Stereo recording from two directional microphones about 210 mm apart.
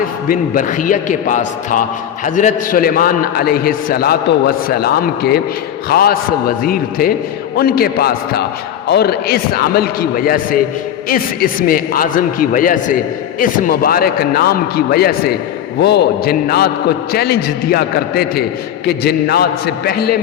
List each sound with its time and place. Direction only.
0.3 s a man's voice: 40° left (ahead or behind)